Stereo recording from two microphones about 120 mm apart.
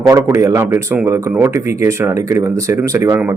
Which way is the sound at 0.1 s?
25° right (ahead or behind).